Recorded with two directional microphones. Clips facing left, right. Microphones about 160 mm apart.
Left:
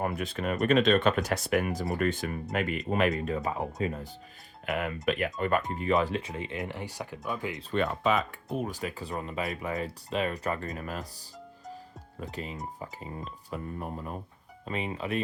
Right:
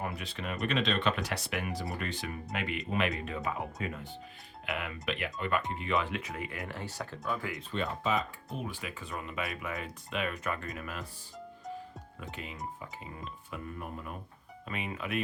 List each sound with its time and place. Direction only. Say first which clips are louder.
0.0 s speech: left 7 dB; 50° left (ahead or behind); by 7.6 s 20° left (ahead or behind)
7.7 s speech: left 5 dB; 70° left (ahead or behind)
8.5 s speech: left 7 dB; 40° left (ahead or behind)
12.2 s speech: left 4 dB; 35° left (ahead or behind)